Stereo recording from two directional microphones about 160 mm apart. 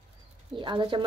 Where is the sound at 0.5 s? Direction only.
30° right (ahead or behind).